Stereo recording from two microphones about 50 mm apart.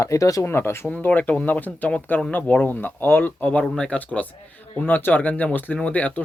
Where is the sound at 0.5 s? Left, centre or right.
Left.